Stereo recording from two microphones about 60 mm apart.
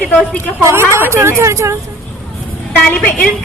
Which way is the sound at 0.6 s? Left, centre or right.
Right.